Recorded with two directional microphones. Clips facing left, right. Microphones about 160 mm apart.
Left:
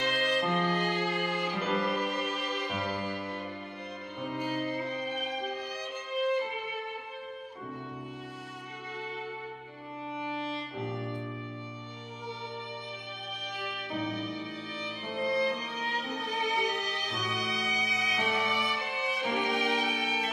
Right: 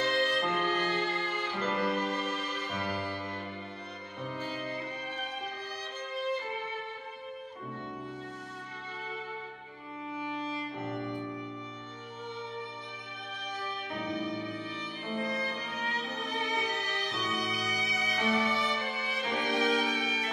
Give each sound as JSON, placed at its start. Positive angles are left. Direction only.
{"t": 0.0, "sound": "music", "side_deg": 10}
{"t": 10.1, "sound": "music", "side_deg": 30}
{"t": 13.6, "sound": "music", "side_deg": 10}
{"t": 15.2, "sound": "music", "side_deg": 30}
{"t": 15.5, "sound": "music", "side_deg": 10}